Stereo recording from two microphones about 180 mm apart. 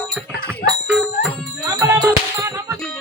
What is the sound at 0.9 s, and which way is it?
Jingle bell, 5° right (ahead or behind).